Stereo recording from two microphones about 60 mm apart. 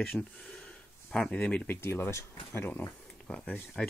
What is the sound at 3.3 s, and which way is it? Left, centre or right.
Speech, centre.